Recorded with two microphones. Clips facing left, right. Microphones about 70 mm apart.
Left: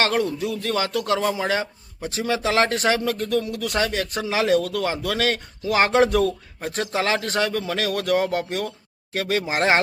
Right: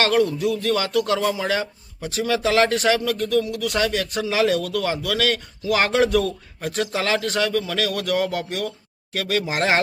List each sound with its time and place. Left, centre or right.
0.0 s speech: left